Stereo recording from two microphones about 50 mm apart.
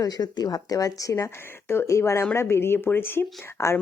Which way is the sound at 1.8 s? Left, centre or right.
Left.